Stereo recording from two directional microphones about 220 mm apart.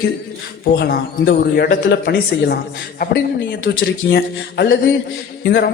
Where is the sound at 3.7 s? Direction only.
50° left (ahead or behind).